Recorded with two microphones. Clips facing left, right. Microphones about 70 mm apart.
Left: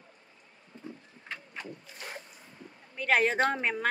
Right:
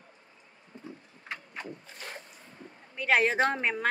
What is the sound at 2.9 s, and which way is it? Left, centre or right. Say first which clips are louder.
Speech: right 1 dB; centre.